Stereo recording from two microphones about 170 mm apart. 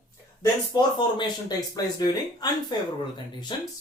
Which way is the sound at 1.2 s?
25° left (ahead or behind).